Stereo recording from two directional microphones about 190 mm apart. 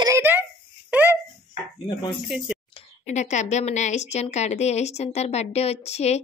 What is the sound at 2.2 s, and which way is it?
Speech, 5° right (ahead or behind).